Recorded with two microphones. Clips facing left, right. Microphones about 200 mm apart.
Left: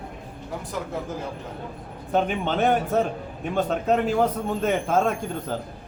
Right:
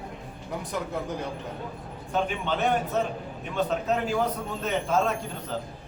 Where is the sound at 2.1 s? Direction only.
50° left (ahead or behind).